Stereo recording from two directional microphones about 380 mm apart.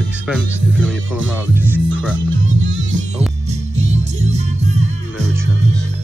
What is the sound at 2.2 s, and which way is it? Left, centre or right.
Music, right.